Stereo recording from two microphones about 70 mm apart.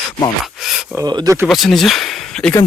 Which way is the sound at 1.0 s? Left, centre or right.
Right.